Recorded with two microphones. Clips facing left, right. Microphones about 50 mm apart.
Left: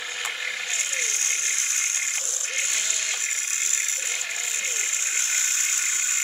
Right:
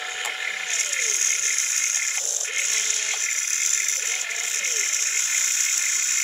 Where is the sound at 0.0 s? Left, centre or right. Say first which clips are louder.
Right 1 dB; centre.